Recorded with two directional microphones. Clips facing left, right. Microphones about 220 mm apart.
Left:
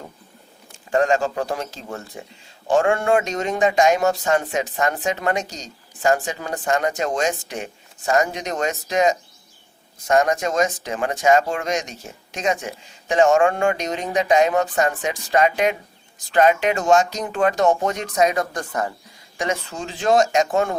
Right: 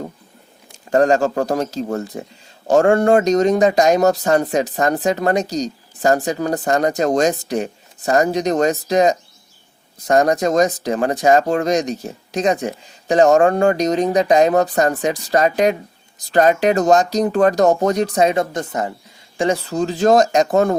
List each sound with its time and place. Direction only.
0.9 s speech: 40° right (ahead or behind); by 18.9 s 20° right (ahead or behind)
19.4 s speech: 35° right (ahead or behind)